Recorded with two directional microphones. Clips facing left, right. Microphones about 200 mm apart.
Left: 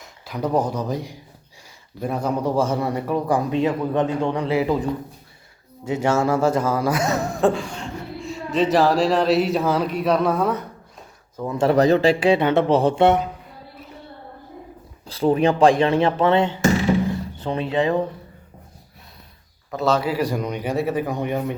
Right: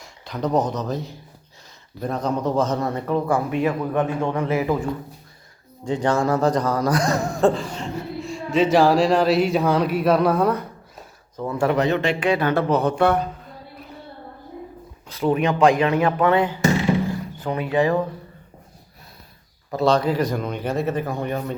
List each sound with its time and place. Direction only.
0.0 s speech: 10° left (ahead or behind)
11.7 s speech: 35° left (ahead or behind)
15.0 s speech: 30° left (ahead or behind)
19.7 s speech: 5° left (ahead or behind)